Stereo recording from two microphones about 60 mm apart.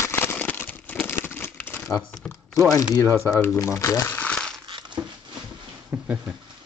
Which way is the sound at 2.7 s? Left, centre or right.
Left.